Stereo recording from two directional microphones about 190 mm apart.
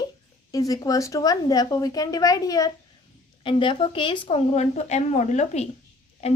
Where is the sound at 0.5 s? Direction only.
20° left (ahead or behind).